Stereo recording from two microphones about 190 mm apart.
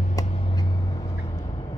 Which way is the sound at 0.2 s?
35° left (ahead or behind).